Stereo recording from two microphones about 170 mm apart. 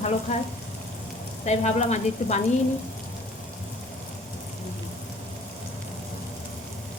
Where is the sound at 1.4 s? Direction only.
40° left (ahead or behind).